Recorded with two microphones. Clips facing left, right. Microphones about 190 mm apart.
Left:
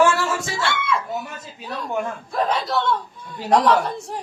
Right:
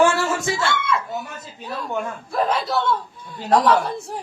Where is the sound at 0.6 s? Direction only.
Centre (ahead or behind).